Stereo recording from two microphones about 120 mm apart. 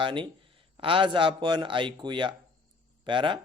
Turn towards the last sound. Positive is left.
turn(degrees=-45)  # may be behind; listen again after turning